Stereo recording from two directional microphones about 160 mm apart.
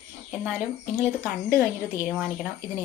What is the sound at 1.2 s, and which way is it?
A woman's voice, 15° right (ahead or behind).